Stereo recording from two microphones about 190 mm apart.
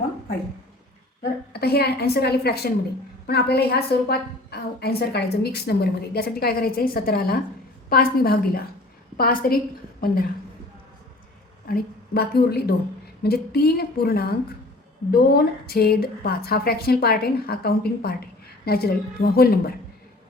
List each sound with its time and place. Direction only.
1.2 s a woman's voice: 55° left (ahead or behind)
11.7 s a woman's voice: 55° left (ahead or behind)